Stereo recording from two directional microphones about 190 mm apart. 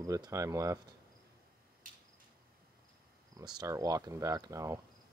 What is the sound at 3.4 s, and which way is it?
Speech, 20° right (ahead or behind).